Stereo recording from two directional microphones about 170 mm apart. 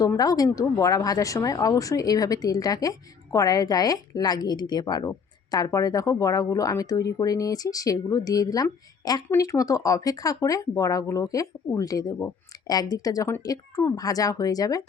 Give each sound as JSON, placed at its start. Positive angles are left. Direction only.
{"t": 0.0, "sound": "speech", "side_deg": 20}